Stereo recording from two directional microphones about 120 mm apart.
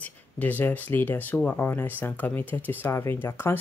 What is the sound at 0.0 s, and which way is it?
Speech, 15° left (ahead or behind).